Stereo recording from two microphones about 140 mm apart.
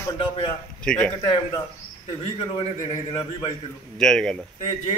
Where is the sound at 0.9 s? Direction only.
10° left (ahead or behind).